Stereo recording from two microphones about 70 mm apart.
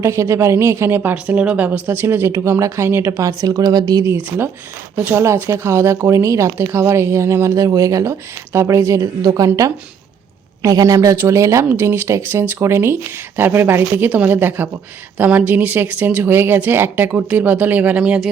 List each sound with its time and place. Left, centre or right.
0.0 s speech: right
1.1 s speech: centre
2.0 s speech: right
3.4 s a woman's voice: right
4.9 s speech: right
5.2 s speech: right
9.2 s speech: right
10.6 s speech: right
11.7 s speech: right